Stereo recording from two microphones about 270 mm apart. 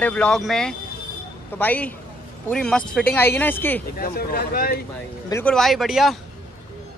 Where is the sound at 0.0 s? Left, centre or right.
Centre.